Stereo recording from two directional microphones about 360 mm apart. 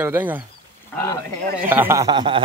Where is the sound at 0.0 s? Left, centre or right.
Centre.